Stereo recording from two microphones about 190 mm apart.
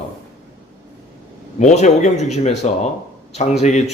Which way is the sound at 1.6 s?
40° left (ahead or behind).